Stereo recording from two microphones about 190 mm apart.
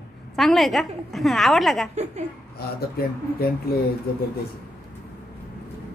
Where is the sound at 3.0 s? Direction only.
55° left (ahead or behind).